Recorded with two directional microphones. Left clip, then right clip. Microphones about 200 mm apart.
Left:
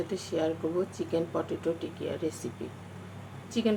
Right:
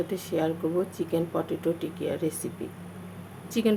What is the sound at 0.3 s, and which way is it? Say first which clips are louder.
Speech: right 2 dB; 25° right (ahead or behind).